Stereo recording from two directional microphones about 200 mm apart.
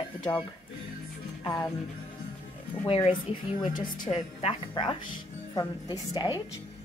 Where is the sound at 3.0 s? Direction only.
25° left (ahead or behind).